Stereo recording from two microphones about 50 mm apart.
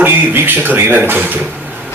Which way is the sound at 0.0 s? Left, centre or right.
Right.